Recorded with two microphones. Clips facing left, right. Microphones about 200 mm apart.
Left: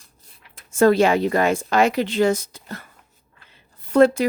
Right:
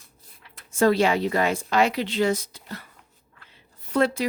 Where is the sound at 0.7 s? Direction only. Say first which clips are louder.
Left 4 dB; 50° left (ahead or behind).